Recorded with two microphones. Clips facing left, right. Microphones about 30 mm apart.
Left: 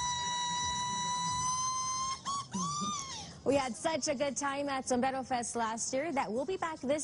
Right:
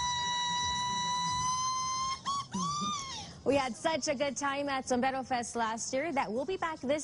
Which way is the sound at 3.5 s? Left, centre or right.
Centre.